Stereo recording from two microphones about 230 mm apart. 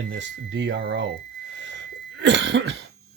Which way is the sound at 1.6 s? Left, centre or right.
Right.